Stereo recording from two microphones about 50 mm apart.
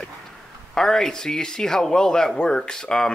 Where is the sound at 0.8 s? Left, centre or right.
Centre.